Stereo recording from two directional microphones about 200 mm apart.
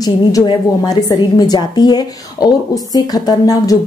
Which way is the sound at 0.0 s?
20° left (ahead or behind).